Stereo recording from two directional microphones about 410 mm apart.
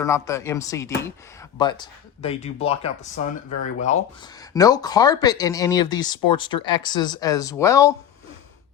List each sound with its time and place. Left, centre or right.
0.0 s speech: centre